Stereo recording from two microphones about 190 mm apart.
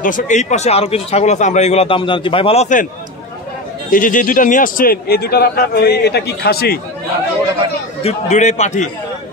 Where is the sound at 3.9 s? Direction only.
45° left (ahead or behind).